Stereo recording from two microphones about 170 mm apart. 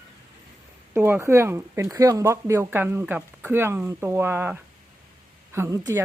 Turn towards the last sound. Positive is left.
turn(degrees=-15)  # may be behind; listen again after turning